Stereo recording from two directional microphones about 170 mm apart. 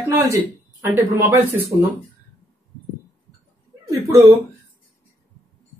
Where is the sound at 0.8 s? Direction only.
15° right (ahead or behind).